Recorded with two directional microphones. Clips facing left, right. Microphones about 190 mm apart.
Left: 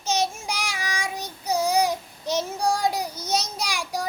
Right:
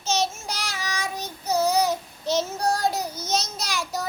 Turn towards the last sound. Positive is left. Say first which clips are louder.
# even
turn(degrees=10)  # may be behind; listen again after turning